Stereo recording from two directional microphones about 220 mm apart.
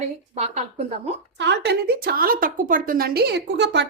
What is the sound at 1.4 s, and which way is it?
A woman's voice, 50° right (ahead or behind).